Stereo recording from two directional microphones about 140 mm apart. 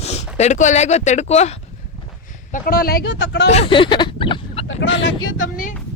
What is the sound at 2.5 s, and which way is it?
Speech, 90° left.